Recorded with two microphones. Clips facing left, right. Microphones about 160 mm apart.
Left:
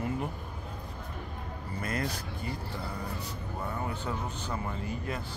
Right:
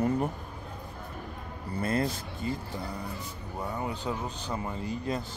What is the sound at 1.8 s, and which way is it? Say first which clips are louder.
Speech: right 5 dB; 30° right (ahead or behind).